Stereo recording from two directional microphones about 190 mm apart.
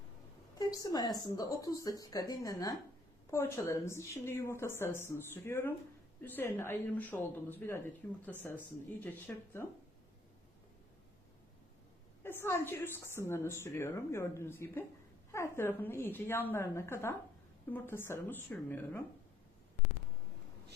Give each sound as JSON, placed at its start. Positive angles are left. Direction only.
{"t": 0.6, "sound": "a woman's voice", "side_deg": 20}
{"t": 12.2, "sound": "a woman's voice", "side_deg": 10}